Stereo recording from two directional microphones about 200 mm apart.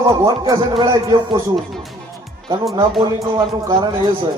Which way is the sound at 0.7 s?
25° right (ahead or behind).